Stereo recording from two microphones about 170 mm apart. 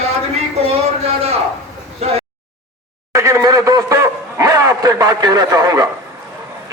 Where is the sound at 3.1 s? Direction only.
15° right (ahead or behind).